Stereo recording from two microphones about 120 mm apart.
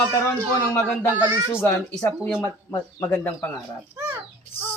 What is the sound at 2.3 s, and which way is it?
Speech, 25° left (ahead or behind).